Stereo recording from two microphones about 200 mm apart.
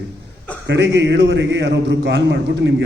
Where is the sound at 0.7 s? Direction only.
60° right (ahead or behind).